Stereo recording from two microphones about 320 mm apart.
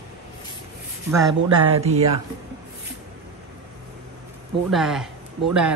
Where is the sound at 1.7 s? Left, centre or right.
Centre.